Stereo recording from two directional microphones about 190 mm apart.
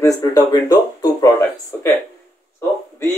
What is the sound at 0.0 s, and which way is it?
Speech, 20° left (ahead or behind).